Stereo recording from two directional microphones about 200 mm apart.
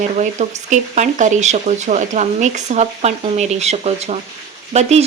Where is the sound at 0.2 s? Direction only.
35° right (ahead or behind).